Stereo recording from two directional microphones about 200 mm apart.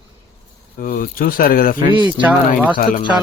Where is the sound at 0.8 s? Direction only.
45° left (ahead or behind).